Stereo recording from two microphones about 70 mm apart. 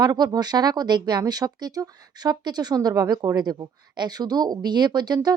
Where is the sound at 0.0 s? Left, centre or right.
Right.